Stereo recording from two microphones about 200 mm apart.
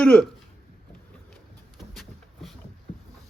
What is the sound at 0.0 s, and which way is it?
Speech, 5° left (ahead or behind).